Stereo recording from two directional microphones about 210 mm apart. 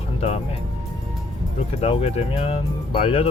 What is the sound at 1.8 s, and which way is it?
Speech, 30° left (ahead or behind).